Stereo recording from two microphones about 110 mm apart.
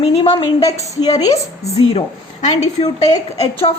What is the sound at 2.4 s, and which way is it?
Speech, 90° left.